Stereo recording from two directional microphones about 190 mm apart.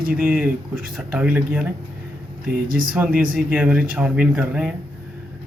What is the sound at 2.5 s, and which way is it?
Speech, 50° right (ahead or behind).